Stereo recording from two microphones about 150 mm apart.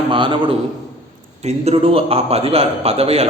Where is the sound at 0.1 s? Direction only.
35° right (ahead or behind).